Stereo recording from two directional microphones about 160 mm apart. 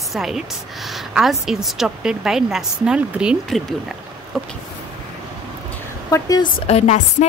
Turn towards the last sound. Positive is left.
turn(degrees=45)  # may be behind; listen again after turning